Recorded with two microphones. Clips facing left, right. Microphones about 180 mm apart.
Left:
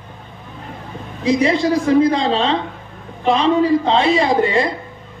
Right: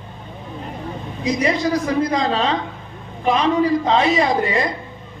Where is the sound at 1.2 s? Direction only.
30° left (ahead or behind).